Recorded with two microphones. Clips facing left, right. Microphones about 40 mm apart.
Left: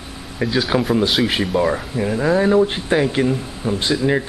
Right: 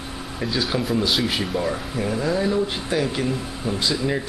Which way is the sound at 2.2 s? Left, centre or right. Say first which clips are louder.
Left 8 dB; left.